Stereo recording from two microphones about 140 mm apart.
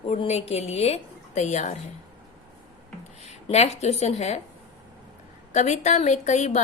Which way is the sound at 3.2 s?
50° left (ahead or behind).